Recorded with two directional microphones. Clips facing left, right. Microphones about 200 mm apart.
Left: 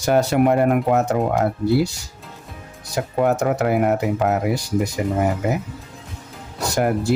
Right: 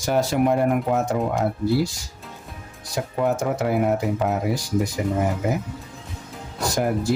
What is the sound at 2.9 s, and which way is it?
Speech, 65° left (ahead or behind).